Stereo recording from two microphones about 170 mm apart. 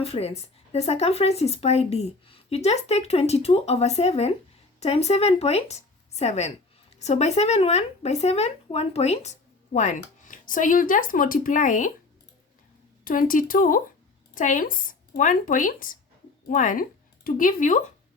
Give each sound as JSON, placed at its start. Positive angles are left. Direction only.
{"t": 0.0, "sound": "speech", "side_deg": 35}
{"t": 13.1, "sound": "speech", "side_deg": 55}